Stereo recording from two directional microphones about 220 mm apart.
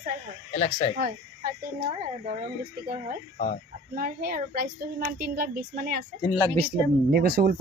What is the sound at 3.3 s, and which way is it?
Speech, 30° left (ahead or behind).